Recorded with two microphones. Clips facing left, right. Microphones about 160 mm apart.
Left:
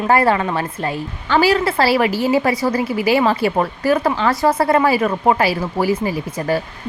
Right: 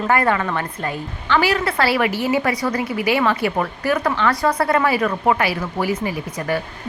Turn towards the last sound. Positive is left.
turn(degrees=30)  # may be behind; listen again after turning